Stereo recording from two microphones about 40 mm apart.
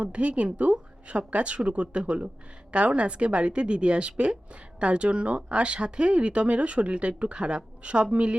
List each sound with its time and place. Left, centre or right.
0.0 s speech: right